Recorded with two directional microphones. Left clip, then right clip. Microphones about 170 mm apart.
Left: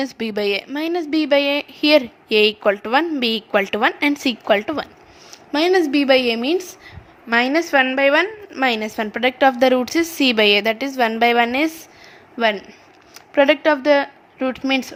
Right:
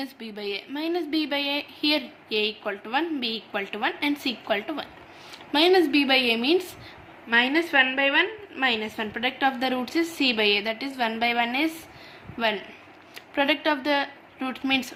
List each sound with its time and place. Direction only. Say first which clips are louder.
0.0 s a woman's voice: left 12 dB; 60° left (ahead or behind)
7.3 s a woman's voice: left 5 dB; 80° left; by 14.9 s 45° left (ahead or behind)